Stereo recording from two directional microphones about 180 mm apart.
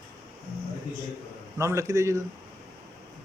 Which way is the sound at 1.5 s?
15° right (ahead or behind).